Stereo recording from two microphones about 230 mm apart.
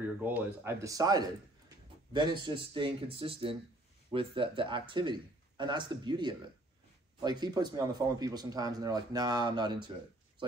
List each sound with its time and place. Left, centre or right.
0.0 s speech: centre